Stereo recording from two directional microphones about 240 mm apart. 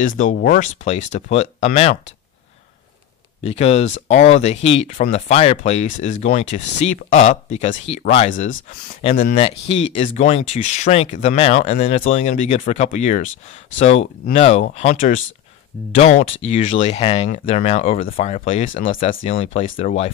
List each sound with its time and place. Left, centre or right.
0.0 s speech: left
3.4 s speech: left